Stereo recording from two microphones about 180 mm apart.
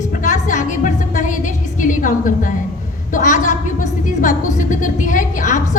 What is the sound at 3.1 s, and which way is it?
A woman's voice, 45° left (ahead or behind).